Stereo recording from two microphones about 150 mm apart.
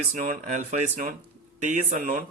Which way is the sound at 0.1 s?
55° right (ahead or behind).